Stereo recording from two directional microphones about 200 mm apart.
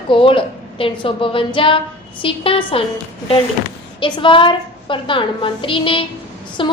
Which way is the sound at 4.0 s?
25° left (ahead or behind).